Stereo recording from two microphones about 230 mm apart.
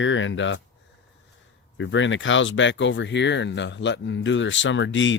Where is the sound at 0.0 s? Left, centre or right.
Left.